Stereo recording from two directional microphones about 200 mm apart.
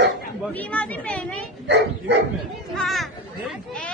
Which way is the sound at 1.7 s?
60° right (ahead or behind).